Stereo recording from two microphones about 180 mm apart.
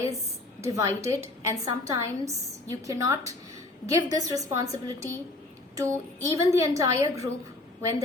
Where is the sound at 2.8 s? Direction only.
20° right (ahead or behind).